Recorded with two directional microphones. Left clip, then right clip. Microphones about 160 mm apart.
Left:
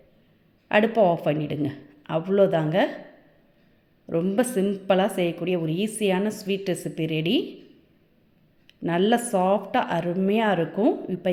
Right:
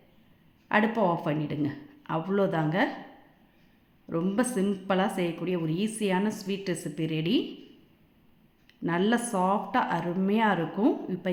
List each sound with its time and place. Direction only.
0.7 s a woman's voice: 20° left (ahead or behind)
4.0 s a woman's voice: 15° left (ahead or behind)
8.6 s a woman's voice: 20° left (ahead or behind)